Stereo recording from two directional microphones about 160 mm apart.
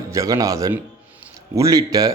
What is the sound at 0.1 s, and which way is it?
A man's voice, 20° right (ahead or behind).